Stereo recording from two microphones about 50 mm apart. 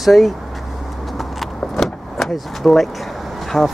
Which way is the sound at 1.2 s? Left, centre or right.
Centre.